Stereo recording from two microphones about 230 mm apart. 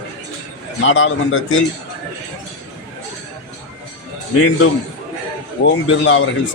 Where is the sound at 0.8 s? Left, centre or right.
Left.